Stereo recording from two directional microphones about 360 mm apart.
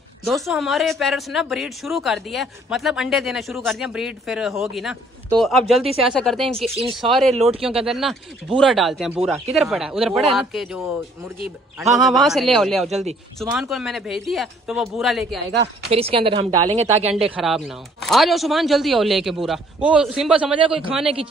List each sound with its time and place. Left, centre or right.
0.2 s speech: centre
15.9 s speech: centre
17.1 s speech: centre